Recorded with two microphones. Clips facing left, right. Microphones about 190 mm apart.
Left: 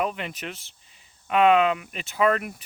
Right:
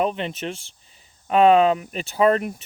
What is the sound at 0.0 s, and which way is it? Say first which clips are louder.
Speech: right 5 dB; 25° right (ahead or behind).